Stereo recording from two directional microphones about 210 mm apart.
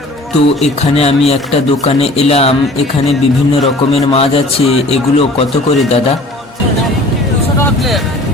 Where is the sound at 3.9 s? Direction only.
30° left (ahead or behind).